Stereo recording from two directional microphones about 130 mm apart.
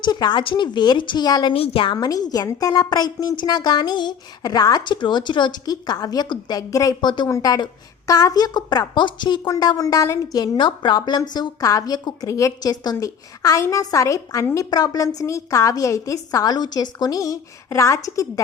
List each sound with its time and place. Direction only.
0.0 s a woman's voice: 35° left (ahead or behind)